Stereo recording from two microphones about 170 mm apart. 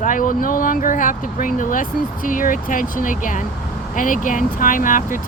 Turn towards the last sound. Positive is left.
turn(degrees=50)  # may be behind; listen again after turning